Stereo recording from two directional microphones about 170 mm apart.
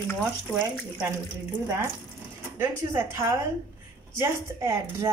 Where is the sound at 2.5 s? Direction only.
15° right (ahead or behind).